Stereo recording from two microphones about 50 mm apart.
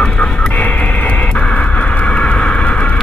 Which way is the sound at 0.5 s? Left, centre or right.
Left.